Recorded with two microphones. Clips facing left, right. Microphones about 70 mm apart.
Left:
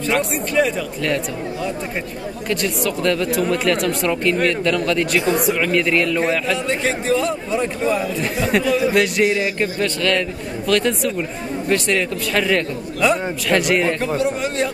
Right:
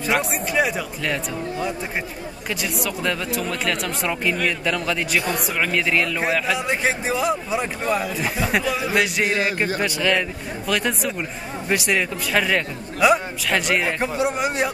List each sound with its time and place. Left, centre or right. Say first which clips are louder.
0.0 s a man's voice: left 2 dB; centre
5.2 s speech: left 7 dB; centre
5.6 s a man's voice: left 3 dB; centre
9.6 s a man's voice: left 2 dB; centre
14.0 s a man's voice: left 2 dB; centre